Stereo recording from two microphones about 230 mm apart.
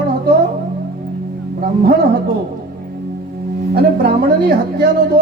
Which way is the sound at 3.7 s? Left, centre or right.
Right.